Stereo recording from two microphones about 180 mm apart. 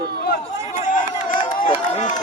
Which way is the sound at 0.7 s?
45° left (ahead or behind).